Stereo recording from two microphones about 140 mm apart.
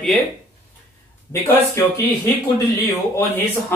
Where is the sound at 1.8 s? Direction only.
20° left (ahead or behind).